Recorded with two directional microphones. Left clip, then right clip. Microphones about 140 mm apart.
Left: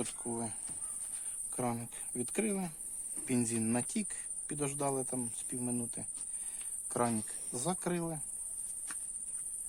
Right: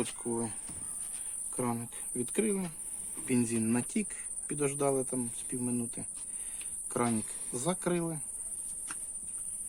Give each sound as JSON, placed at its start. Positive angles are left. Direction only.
{"t": 0.3, "sound": "speech", "side_deg": 55}
{"t": 1.5, "sound": "speech", "side_deg": 90}
{"t": 6.5, "sound": "cricket", "side_deg": 75}
{"t": 7.6, "sound": "speech", "side_deg": 85}